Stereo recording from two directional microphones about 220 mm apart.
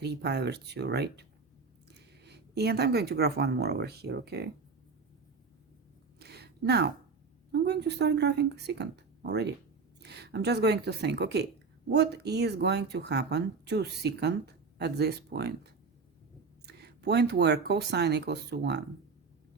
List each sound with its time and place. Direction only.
0.0 s speech: 50° right (ahead or behind)
6.1 s a sound: 45° right (ahead or behind)
7.5 s speech: 50° right (ahead or behind)
16.8 s speech: 50° right (ahead or behind)